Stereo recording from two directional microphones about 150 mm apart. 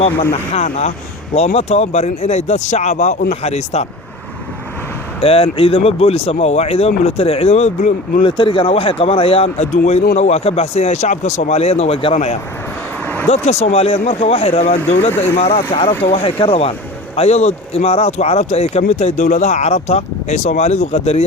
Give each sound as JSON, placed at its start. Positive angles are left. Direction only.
{"t": 0.5, "sound": "speech", "side_deg": 45}
{"t": 5.2, "sound": "speech", "side_deg": 40}
{"t": 8.2, "sound": "speech", "side_deg": 35}
{"t": 15.5, "sound": "speech", "side_deg": 35}
{"t": 15.9, "sound": "speech", "side_deg": 15}
{"t": 16.1, "sound": "speech", "side_deg": 35}